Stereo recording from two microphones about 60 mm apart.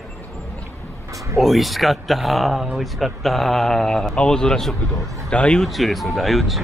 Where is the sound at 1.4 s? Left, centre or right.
Centre.